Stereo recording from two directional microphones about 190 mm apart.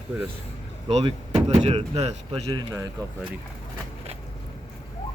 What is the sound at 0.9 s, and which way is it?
Speech, 35° right (ahead or behind).